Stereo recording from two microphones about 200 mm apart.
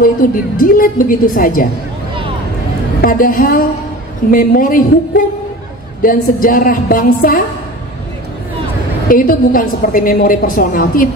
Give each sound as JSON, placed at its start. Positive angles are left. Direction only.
{"t": 0.2, "sound": "a woman's voice", "side_deg": 45}
{"t": 3.0, "sound": "a woman's voice", "side_deg": 45}
{"t": 9.1, "sound": "a woman's voice", "side_deg": 45}